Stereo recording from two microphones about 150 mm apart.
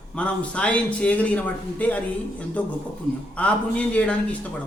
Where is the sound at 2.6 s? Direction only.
10° left (ahead or behind).